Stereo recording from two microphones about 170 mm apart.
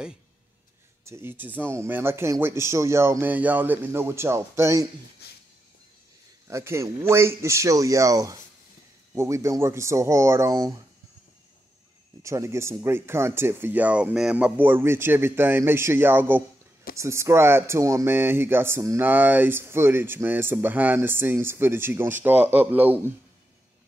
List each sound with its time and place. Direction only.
1.0 s speech: 15° right (ahead or behind)
5.2 s music: 70° left (ahead or behind)
6.4 s speech: 15° right (ahead or behind)
12.2 s speech: 15° right (ahead or behind)